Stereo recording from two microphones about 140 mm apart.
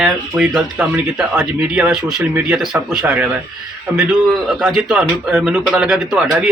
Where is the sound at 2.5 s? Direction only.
Centre (ahead or behind).